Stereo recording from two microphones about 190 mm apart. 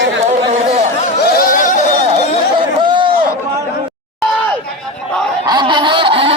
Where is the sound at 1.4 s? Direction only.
45° left (ahead or behind).